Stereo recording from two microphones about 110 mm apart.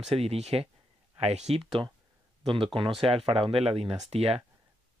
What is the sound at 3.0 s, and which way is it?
Speech, 60° right (ahead or behind).